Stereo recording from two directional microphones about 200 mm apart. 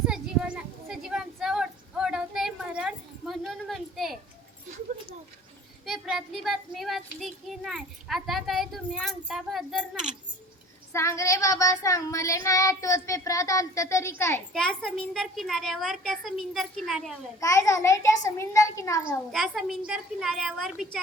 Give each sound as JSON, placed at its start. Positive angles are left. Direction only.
{"t": 0.1, "sound": "child singing", "side_deg": -5}
{"t": 5.8, "sound": "child singing", "side_deg": 0}
{"t": 10.9, "sound": "child singing", "side_deg": 15}
{"t": 14.5, "sound": "a child's voice", "side_deg": 5}
{"t": 17.4, "sound": "a child's voice", "side_deg": 15}
{"t": 19.3, "sound": "a child's voice", "side_deg": 0}